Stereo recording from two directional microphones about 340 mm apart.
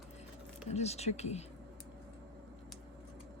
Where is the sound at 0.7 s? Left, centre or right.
Centre.